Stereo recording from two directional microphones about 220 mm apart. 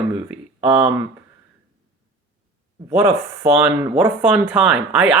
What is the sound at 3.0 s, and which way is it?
Speech, 10° right (ahead or behind).